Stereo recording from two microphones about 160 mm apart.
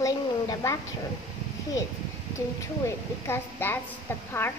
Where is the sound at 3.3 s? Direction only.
15° left (ahead or behind).